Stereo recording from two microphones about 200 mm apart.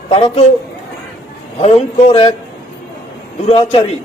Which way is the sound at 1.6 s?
30° left (ahead or behind).